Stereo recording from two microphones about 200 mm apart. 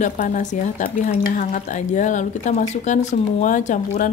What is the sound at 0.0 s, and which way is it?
A woman's voice, 40° left (ahead or behind).